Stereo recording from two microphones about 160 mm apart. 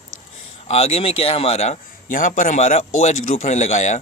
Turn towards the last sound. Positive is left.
turn(degrees=45)  # may be behind; listen again after turning